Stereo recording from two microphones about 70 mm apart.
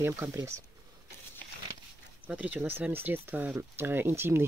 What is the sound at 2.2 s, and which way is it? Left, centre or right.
Speech, right.